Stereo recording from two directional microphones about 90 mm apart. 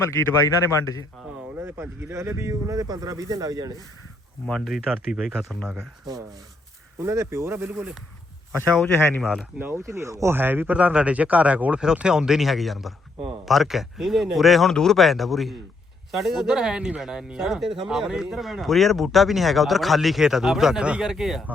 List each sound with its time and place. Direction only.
0.0 s a man's voice: 30° left (ahead or behind)
1.5 s speech: 25° right (ahead or behind); by 3.8 s 45° right (ahead or behind)
4.4 s speech: 5° left (ahead or behind)
4.9 s speech: 5° right (ahead or behind)
5.6 s speech: 25° right (ahead or behind)
6.1 s speech: 45° right (ahead or behind)
7.0 s speech: 30° right (ahead or behind)
8.7 s speech: 5° left (ahead or behind)
9.0 s speech: 25° left (ahead or behind)
9.6 s speech: 25° right (ahead or behind)
10.3 s speech: 25° right (ahead or behind); by 21.4 s 5° right (ahead or behind)